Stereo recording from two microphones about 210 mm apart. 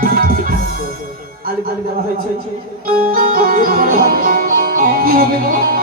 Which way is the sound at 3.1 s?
45° right (ahead or behind).